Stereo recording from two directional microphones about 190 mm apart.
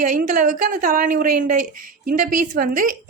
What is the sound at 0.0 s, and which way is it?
A woman's voice, 45° right (ahead or behind).